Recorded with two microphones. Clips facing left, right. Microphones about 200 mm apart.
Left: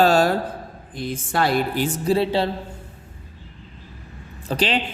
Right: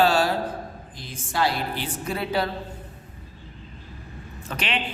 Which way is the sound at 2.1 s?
30° left (ahead or behind).